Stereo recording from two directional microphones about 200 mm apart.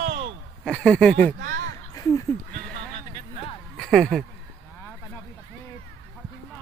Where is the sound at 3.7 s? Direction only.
Centre (ahead or behind).